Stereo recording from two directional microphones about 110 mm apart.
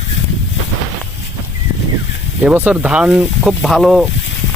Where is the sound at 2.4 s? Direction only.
10° right (ahead or behind).